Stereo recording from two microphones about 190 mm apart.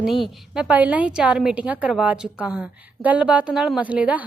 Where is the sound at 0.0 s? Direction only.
Centre (ahead or behind).